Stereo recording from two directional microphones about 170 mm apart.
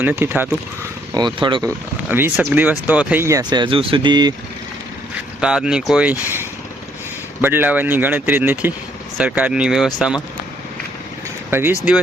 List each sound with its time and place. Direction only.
0.0 s speech: 10° right (ahead or behind)
1.1 s speech: 25° right (ahead or behind)
2.0 s speech: 10° right (ahead or behind)
5.4 s speech: 5° right (ahead or behind)
11.5 s speech: 10° right (ahead or behind)